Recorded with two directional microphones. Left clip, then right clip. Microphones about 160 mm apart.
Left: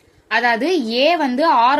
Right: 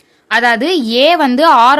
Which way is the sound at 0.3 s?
30° right (ahead or behind).